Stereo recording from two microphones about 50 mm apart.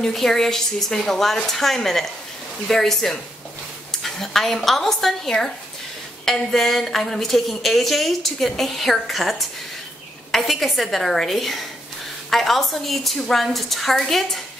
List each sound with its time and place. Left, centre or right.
0.0 s a woman's voice: centre